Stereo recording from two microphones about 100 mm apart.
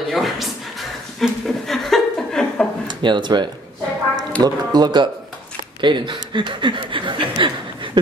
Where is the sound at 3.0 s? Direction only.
50° right (ahead or behind).